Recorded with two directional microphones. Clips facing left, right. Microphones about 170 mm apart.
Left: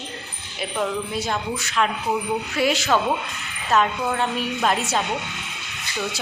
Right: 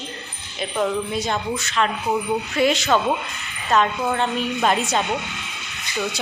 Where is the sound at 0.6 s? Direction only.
5° left (ahead or behind).